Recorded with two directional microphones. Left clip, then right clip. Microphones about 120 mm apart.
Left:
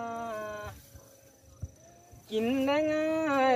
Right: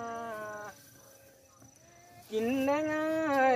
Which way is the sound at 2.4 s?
25° left (ahead or behind).